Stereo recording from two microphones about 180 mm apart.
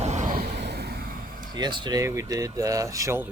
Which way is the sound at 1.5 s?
25° right (ahead or behind).